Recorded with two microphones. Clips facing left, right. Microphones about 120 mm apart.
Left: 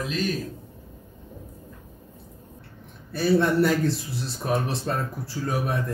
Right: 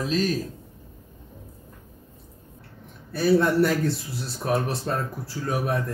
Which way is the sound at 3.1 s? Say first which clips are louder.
Right 1 dB; centre (ahead or behind).